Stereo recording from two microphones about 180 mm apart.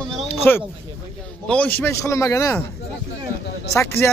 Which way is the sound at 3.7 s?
15° left (ahead or behind).